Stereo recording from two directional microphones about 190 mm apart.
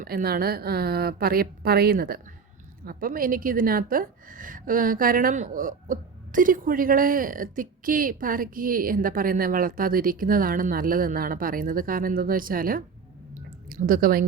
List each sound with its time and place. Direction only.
0.0 s a woman's voice: 50° right (ahead or behind)